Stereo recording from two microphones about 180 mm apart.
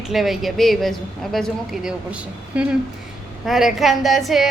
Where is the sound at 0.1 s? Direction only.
Centre (ahead or behind).